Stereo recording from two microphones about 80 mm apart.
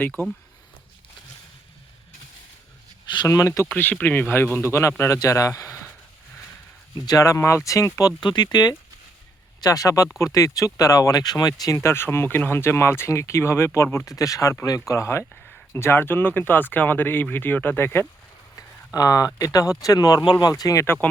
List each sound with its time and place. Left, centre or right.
3.2 s speech: left
4.0 s speech: left
4.6 s speech: left
7.0 s speech: left
8.2 s speech: left
9.6 s speech: left
11.6 s speech: left
14.1 s speech: left
18.9 s speech: left
20.8 s speech: left